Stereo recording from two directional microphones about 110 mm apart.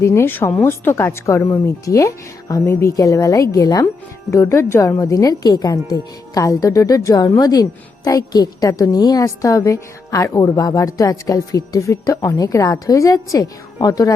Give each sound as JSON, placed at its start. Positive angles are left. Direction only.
{"t": 0.0, "sound": "a woman's voice", "side_deg": 25}